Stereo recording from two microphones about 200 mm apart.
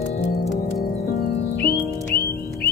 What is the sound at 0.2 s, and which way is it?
Music, 50° left (ahead or behind).